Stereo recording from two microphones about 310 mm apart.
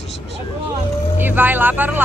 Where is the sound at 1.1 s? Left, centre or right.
Centre.